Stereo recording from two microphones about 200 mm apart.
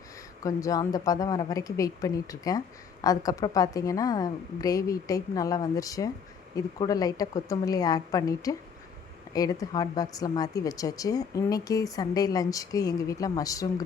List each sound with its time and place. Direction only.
0.4 s a woman's voice: 15° left (ahead or behind)